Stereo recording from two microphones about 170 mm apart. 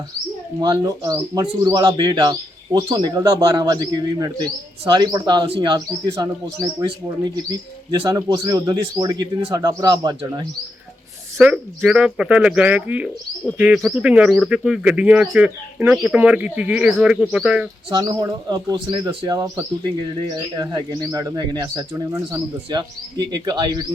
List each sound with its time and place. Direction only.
0.6 s speech: 20° right (ahead or behind)
11.3 s speech: 5° right (ahead or behind)
17.9 s speech: 25° right (ahead or behind)